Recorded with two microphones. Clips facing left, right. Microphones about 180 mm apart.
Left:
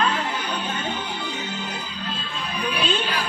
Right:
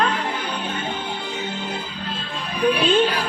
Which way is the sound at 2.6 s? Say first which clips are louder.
Right 8 dB; 55° right (ahead or behind).